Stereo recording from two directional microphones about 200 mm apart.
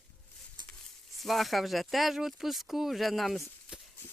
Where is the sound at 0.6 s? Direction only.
20° right (ahead or behind).